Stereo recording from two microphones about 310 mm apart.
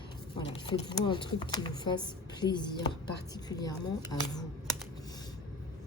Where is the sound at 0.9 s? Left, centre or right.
Centre.